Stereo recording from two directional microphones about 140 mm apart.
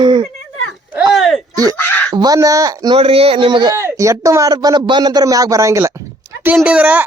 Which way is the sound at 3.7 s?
20° right (ahead or behind).